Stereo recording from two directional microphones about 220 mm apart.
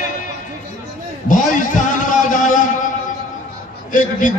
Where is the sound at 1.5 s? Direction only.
35° left (ahead or behind).